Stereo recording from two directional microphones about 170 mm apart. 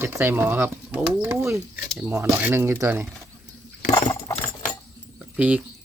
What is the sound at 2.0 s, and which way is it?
Speech, 15° right (ahead or behind).